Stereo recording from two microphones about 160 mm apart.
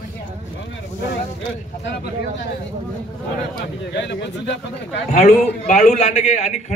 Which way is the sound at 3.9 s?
90° left.